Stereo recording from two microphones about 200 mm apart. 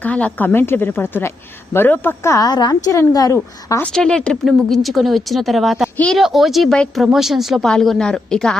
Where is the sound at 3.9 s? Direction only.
5° left (ahead or behind).